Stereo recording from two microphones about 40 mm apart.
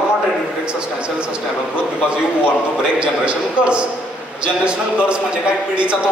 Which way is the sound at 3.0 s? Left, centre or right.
Right.